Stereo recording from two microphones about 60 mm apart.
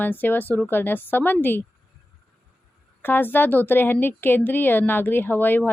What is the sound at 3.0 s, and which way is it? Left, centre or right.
Speech, left.